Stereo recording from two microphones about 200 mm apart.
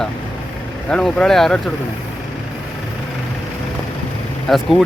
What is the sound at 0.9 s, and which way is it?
Speech, 5° left (ahead or behind).